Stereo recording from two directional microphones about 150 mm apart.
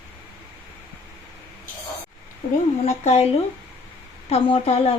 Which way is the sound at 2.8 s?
50° left (ahead or behind).